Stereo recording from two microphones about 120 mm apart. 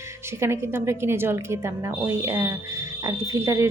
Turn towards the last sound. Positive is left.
turn(degrees=-25)  # may be behind; listen again after turning